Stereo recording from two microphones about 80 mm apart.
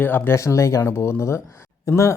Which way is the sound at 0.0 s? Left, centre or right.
Left.